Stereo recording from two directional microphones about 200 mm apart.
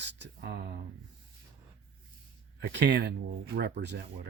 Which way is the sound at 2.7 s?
55° right (ahead or behind).